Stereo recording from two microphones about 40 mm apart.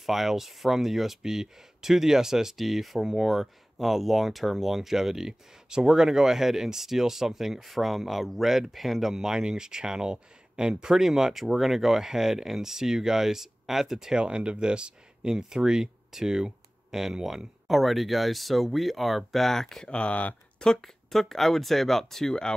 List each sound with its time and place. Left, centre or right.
0.0 s speech: centre
14.2 s speech: right; by 19.9 s centre
19.9 s speech: left
20.8 s speech: centre